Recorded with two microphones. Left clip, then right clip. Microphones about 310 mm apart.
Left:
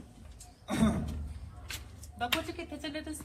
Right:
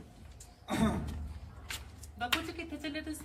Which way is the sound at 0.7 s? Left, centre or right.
Centre.